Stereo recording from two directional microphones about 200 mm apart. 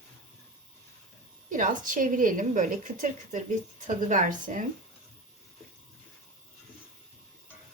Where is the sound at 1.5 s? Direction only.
40° right (ahead or behind).